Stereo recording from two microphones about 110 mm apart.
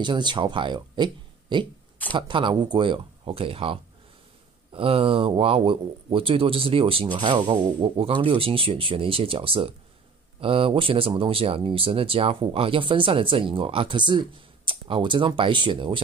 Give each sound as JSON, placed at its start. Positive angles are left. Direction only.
{"t": 0.0, "sound": "speech", "side_deg": -45}
{"t": 7.2, "sound": "speech", "side_deg": -45}